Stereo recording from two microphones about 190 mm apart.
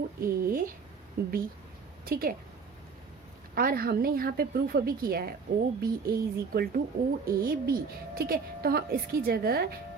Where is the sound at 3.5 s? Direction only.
50° right (ahead or behind).